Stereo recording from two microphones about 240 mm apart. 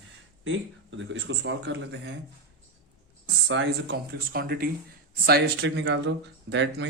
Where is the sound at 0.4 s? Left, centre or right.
Right.